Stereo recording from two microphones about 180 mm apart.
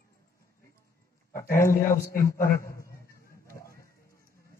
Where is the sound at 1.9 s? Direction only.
15° left (ahead or behind).